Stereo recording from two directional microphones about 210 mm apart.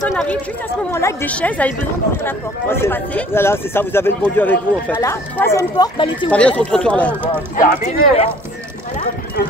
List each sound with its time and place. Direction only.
0.1 s speech: 5° left (ahead or behind); by 6.3 s 20° left (ahead or behind)
6.3 s speech: 5° left (ahead or behind)
7.5 s speech: 35° left (ahead or behind)